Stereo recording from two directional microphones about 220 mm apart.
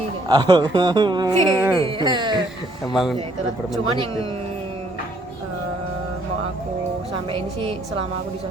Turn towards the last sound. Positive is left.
turn(degrees=-25)  # may be behind; listen again after turning